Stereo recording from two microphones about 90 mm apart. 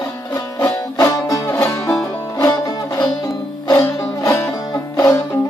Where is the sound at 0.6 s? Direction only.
25° left (ahead or behind).